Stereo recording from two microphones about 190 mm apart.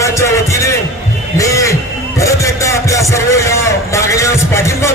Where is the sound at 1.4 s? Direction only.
15° left (ahead or behind).